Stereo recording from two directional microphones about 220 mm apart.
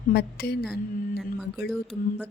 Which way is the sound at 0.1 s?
45° left (ahead or behind).